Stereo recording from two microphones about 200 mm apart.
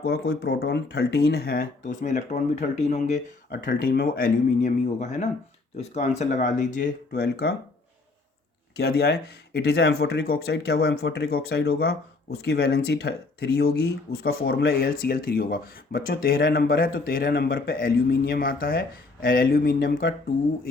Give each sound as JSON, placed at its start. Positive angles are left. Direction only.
{"t": 0.0, "sound": "speech", "side_deg": 55}
{"t": 3.5, "sound": "speech", "side_deg": 45}
{"t": 8.7, "sound": "speech", "side_deg": 55}